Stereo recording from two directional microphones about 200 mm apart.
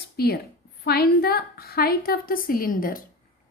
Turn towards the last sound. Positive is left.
turn(degrees=45)  # may be behind; listen again after turning